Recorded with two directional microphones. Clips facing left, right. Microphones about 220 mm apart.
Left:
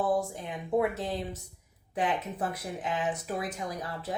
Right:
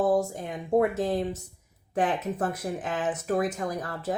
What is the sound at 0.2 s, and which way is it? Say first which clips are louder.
Speech: right 4 dB; 45° right (ahead or behind).